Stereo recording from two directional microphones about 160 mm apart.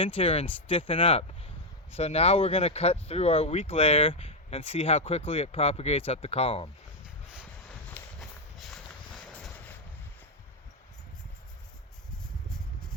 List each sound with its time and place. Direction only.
0.0 s speech: 35° left (ahead or behind)
7.0 s a sound: 5° right (ahead or behind)
8.2 s train: centre (ahead or behind)